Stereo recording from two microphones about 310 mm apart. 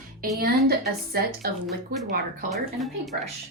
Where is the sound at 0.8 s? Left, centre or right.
Right.